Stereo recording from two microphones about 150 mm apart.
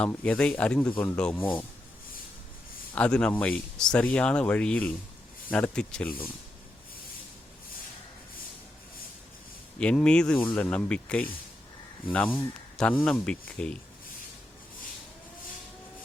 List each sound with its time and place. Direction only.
0.0 s speech: 10° left (ahead or behind)
2.9 s speech: 5° left (ahead or behind)
9.7 s speech: 5° left (ahead or behind)